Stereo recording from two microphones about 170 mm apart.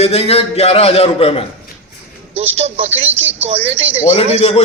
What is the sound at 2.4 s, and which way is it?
A man's voice, 35° right (ahead or behind).